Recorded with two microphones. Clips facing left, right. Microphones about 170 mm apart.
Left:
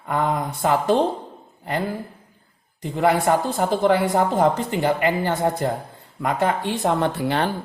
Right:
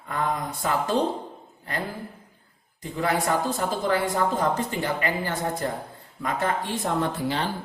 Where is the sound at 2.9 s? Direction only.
70° left (ahead or behind).